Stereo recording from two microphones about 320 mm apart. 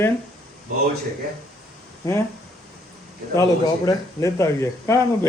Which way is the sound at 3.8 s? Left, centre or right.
Centre.